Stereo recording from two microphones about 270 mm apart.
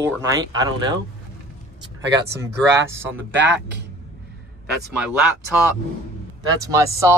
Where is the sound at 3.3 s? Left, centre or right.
Right.